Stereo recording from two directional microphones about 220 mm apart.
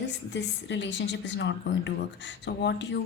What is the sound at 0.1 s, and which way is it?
Speech, 55° left (ahead or behind).